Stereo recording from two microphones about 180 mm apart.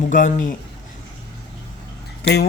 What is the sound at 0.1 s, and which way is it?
Speech, 45° left (ahead or behind).